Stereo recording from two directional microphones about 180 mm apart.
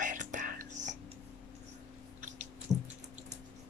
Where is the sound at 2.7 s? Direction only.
20° right (ahead or behind).